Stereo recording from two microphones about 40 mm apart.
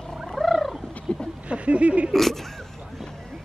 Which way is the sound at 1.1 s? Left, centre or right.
Left.